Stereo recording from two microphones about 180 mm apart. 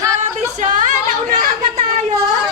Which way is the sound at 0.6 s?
45° right (ahead or behind).